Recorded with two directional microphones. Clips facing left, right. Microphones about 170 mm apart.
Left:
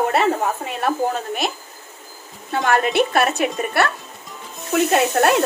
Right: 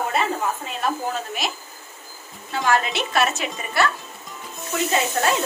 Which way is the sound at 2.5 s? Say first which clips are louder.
Left 4 dB; 55° left (ahead or behind).